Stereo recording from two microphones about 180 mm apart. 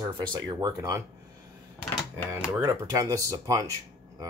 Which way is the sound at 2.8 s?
20° right (ahead or behind).